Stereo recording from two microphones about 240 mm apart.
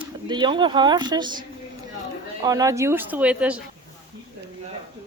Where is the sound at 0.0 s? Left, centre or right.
Centre.